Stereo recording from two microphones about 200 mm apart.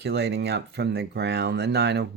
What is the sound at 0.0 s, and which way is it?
Speech, 55° right (ahead or behind).